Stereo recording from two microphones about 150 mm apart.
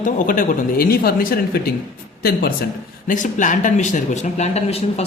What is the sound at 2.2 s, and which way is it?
Speech, 90° left.